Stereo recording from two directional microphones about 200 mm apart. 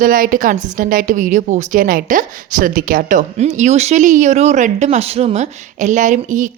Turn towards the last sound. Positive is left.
turn(degrees=-40)  # may be behind; listen again after turning